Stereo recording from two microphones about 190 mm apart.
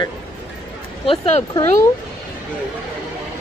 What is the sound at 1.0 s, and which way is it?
Speech, 30° left (ahead or behind).